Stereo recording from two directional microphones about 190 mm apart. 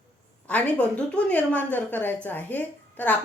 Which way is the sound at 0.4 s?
5° left (ahead or behind).